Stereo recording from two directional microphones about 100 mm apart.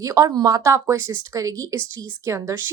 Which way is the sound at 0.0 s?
35° right (ahead or behind).